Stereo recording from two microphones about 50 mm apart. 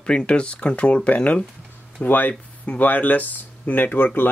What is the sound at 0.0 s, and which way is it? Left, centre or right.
Speech, left.